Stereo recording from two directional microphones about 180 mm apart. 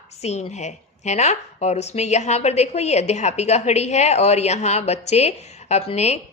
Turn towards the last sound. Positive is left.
turn(degrees=35)  # may be behind; listen again after turning